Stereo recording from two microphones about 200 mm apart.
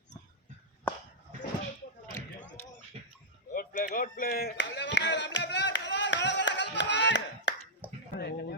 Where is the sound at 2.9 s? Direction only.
30° right (ahead or behind).